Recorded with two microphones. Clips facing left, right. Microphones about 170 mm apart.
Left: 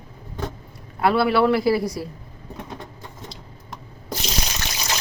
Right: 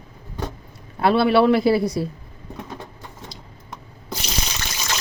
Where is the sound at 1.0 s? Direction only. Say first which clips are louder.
Right 2 dB; 25° right (ahead or behind).